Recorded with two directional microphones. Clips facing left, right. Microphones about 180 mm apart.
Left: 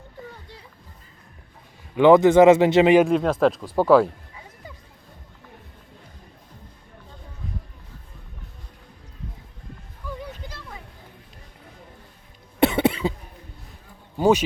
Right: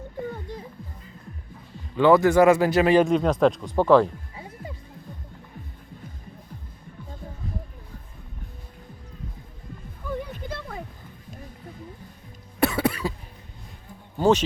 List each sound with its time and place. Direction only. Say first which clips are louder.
0.3 s music: right 9 dB; 45° right (ahead or behind)
2.0 s speech: left 4 dB; 20° left (ahead or behind)
3.0 s speech: left 1 dB; 5° left (ahead or behind)
10.0 s a sound: right 5 dB; 55° right (ahead or behind)
10.5 s music: right 7 dB; 50° right (ahead or behind)
12.5 s cough: left 4 dB; 25° left (ahead or behind)
14.2 s a sound: left 1 dB; 10° left (ahead or behind)